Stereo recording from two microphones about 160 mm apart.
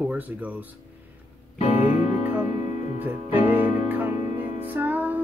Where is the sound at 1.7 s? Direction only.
10° right (ahead or behind).